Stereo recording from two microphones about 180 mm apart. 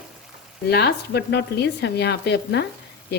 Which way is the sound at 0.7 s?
65° left (ahead or behind).